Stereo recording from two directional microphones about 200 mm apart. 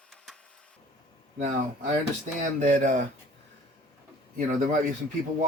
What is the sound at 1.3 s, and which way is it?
Speech, 35° right (ahead or behind).